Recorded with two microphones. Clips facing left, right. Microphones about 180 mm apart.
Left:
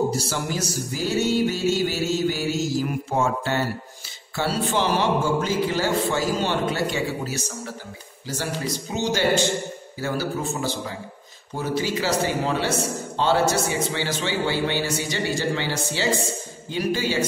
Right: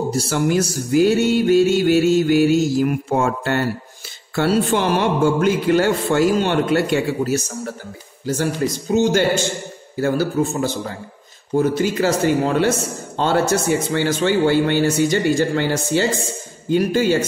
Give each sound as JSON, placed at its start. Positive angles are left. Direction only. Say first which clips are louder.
{"t": 0.3, "sound": "music", "louder": "right 9 dB", "side_deg": -60}
{"t": 8.5, "sound": "a man's voice", "louder": "right 10 dB", "side_deg": -50}